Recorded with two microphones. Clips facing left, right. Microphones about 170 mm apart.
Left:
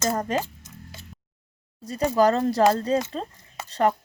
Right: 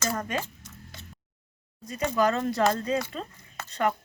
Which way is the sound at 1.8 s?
35° left (ahead or behind).